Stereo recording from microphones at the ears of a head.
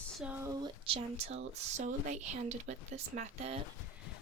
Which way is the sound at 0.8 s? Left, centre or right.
Right.